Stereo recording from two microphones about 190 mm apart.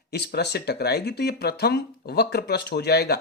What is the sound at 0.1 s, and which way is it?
Speech, 60° left (ahead or behind).